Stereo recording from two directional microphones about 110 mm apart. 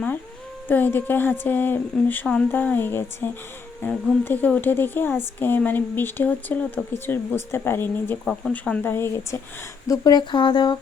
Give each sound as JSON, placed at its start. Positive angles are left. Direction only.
{"t": 0.7, "sound": "a woman's voice", "side_deg": 15}
{"t": 8.2, "sound": "a woman's voice", "side_deg": 5}
{"t": 8.8, "sound": "speech", "side_deg": 20}